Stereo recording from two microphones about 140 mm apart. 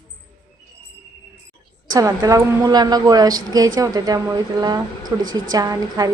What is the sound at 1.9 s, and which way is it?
A woman's voice, 25° right (ahead or behind).